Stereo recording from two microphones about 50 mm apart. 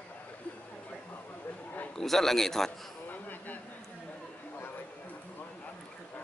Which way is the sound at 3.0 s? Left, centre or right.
Left.